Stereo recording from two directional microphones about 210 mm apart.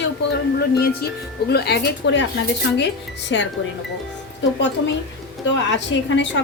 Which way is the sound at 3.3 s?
65° left (ahead or behind).